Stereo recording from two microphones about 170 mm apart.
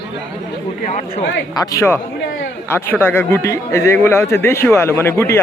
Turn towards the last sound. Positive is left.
turn(degrees=15)  # may be behind; listen again after turning